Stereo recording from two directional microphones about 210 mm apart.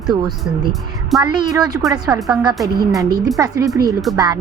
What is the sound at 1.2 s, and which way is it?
A woman's voice, 20° right (ahead or behind).